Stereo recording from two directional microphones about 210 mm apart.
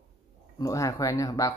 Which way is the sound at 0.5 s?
15° left (ahead or behind).